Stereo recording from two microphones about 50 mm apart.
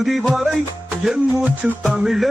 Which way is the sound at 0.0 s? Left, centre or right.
Centre.